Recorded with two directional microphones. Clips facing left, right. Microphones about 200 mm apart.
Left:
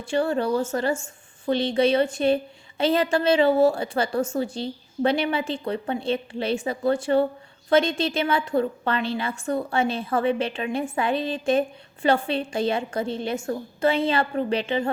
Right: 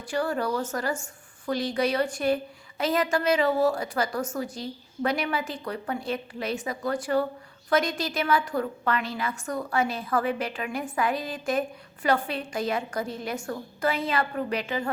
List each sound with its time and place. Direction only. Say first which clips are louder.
0.0 s a woman's voice: left 4 dB; 25° left (ahead or behind)